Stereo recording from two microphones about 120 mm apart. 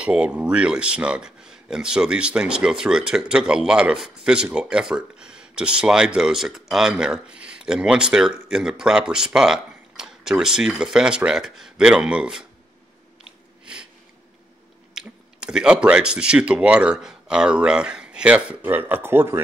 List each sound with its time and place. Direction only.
0.0 s speech: 10° right (ahead or behind)
15.0 s speech: 5° right (ahead or behind)